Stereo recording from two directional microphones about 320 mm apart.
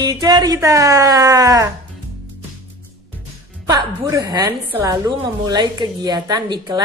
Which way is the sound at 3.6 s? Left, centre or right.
Centre.